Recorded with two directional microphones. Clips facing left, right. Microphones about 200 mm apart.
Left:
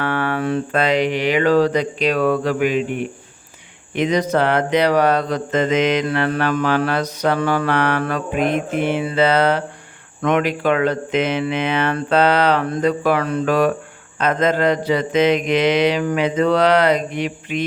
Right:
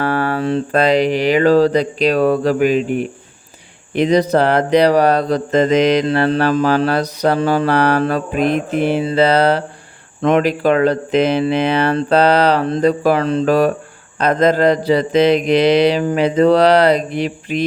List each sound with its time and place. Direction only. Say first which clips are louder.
0.0 s speech: right 3 dB; 35° right (ahead or behind)